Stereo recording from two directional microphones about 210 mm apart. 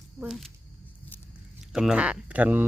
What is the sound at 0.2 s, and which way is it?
Speech, centre (ahead or behind).